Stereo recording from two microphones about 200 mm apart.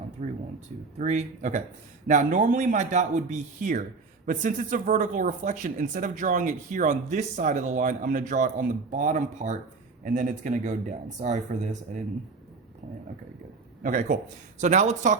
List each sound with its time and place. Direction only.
0.2 s speech: 35° right (ahead or behind)
13.8 s speech: 40° right (ahead or behind)